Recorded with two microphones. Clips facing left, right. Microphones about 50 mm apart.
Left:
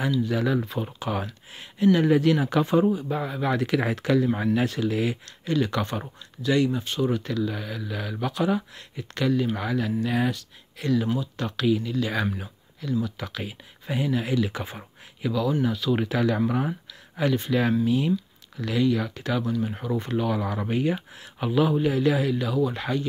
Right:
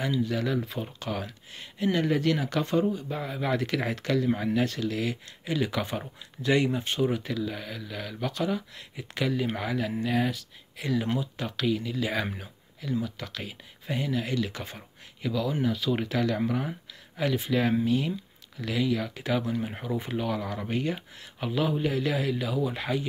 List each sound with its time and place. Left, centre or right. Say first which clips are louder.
0.2 s speech: left 3 dB; centre
5.2 s speech: left 4 dB; centre
6.4 s speech: left 2 dB; right
7.0 s speech: left 4 dB; centre
8.9 s speech: left 4 dB; centre
13.2 s speech: left 4 dB; centre
15.2 s speech: left 3 dB; centre
17.2 s speech: left 3 dB; centre